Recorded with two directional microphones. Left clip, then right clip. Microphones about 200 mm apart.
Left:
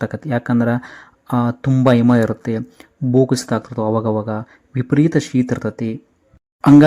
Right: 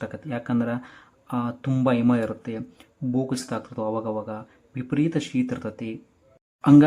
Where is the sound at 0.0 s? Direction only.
35° left (ahead or behind).